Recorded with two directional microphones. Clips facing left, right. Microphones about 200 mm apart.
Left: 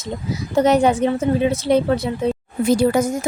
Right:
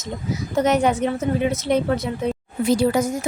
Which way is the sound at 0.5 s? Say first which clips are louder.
Left 4 dB; 30° left (ahead or behind).